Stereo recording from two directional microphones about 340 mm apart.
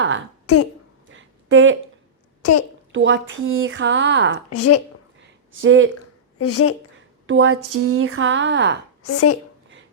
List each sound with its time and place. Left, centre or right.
0.4 s a child's voice: left
1.1 s a sound: right
2.4 s a child's voice: left
2.9 s speech: right
4.4 s a woman's voice: left
5.6 s speech: right
6.4 s a woman's voice: left
7.3 s speech: right
9.0 s a woman's voice: left